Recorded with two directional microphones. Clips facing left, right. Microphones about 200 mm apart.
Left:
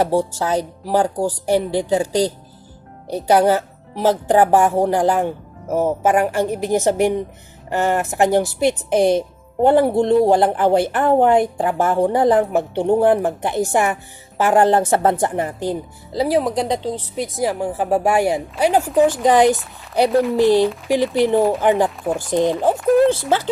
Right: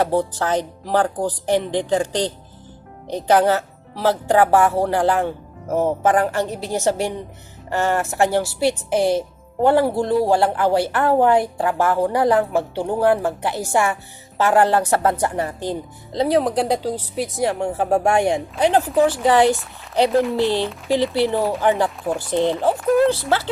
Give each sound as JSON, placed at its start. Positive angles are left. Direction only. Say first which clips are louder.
{"t": 0.0, "sound": "a woman's voice", "louder": "left 1 dB", "side_deg": 10}
{"t": 20.1, "sound": "speech", "louder": "left 2 dB", "side_deg": 0}
{"t": 20.3, "sound": "speech", "louder": "left 6 dB", "side_deg": 15}
{"t": 21.8, "sound": "speech", "louder": "left 2 dB", "side_deg": 0}